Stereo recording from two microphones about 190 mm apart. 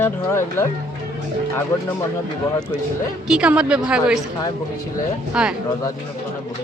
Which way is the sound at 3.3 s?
5° right (ahead or behind).